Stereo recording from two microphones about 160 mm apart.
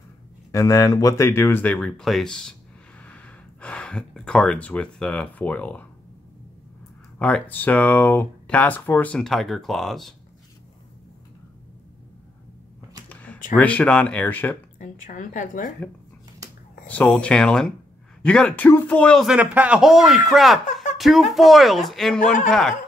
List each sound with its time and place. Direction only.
0.5 s speech: 20° left (ahead or behind)
7.2 s speech: 10° left (ahead or behind)
13.1 s a sound: 10° left (ahead or behind)
13.6 s speech: 10° left (ahead or behind)
14.8 s a woman's voice: 55° left (ahead or behind)
16.9 s speech: 5° left (ahead or behind)